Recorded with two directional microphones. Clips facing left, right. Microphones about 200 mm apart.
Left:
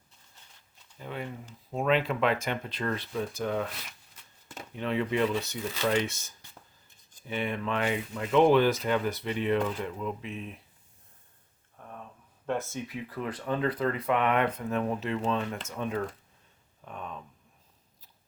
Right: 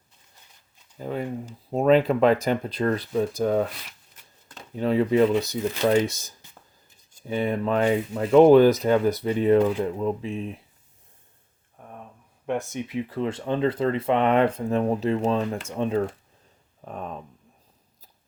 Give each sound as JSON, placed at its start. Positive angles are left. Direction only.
{"t": 0.9, "sound": "speech", "side_deg": -40}
{"t": 4.7, "sound": "speech", "side_deg": -40}
{"t": 11.8, "sound": "a sound", "side_deg": -10}
{"t": 12.5, "sound": "speech", "side_deg": -15}